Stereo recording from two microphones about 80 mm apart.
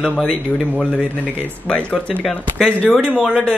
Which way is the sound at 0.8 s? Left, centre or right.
Centre.